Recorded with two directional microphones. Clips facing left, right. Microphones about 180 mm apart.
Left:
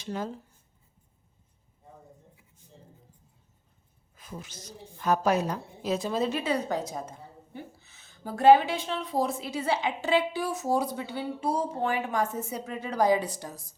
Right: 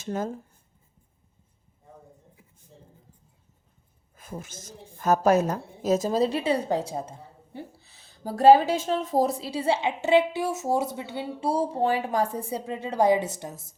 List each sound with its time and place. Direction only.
0.0 s speech: 45° right (ahead or behind)
4.1 s a woman's voice: 50° right (ahead or behind); by 13.7 s 25° right (ahead or behind)